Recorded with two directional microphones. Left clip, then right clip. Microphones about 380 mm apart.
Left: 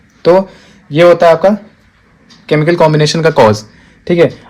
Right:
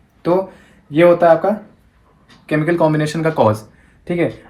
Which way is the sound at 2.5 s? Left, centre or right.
Left.